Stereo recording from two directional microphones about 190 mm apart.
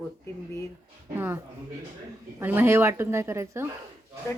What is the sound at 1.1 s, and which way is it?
A woman's voice, 10° right (ahead or behind).